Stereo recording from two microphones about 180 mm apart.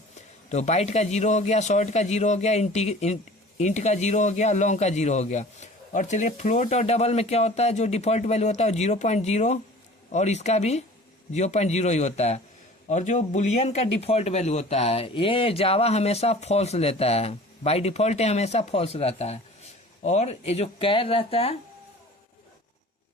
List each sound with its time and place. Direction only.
0.5 s speech: 40° left (ahead or behind)